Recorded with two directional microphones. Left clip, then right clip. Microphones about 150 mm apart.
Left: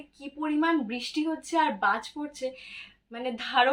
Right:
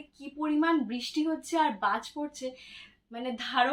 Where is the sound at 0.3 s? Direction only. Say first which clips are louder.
Left 1 dB; 20° left (ahead or behind).